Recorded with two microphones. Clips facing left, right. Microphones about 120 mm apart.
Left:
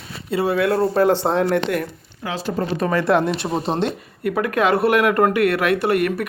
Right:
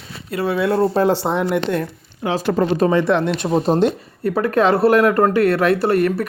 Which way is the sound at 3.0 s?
5° left (ahead or behind).